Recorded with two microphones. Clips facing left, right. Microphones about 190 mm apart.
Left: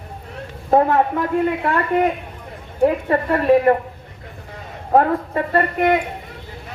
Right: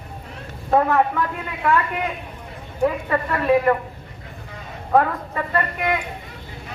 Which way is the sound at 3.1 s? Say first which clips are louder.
Left 3 dB; 35° left (ahead or behind).